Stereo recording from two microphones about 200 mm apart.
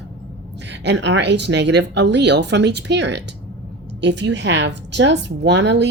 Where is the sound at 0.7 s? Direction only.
60° right (ahead or behind).